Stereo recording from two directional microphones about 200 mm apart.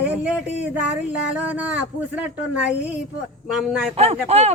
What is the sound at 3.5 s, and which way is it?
Speech, centre (ahead or behind).